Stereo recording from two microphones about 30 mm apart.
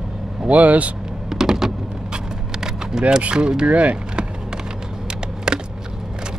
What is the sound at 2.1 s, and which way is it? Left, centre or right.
Vehicle, centre.